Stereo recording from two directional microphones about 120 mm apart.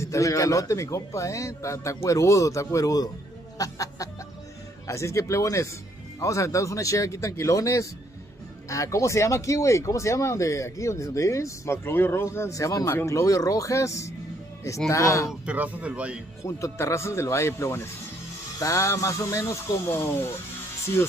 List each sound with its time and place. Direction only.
0.0 s speech: 25° left (ahead or behind)
15.4 s speech: 15° right (ahead or behind)
16.4 s speech: 25° left (ahead or behind)